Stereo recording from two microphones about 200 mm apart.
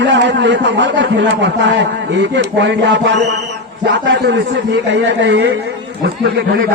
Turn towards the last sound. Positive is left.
turn(degrees=-50)  # may be behind; listen again after turning